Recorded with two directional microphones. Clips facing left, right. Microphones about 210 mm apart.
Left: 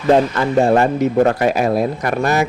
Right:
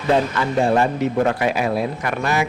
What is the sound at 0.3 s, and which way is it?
Speech, 45° left (ahead or behind).